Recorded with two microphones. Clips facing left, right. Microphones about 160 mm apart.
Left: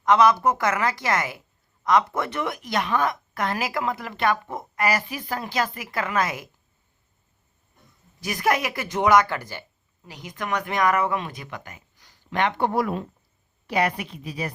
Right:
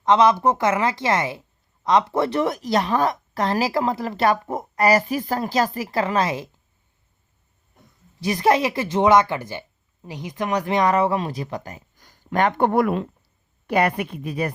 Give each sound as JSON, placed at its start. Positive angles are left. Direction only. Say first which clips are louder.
{"t": 0.0, "sound": "a woman's voice", "louder": "right 2 dB", "side_deg": -25}
{"t": 8.2, "sound": "speech", "louder": "right 5 dB", "side_deg": -30}
{"t": 13.7, "sound": "a woman's voice", "louder": "right 4 dB", "side_deg": -50}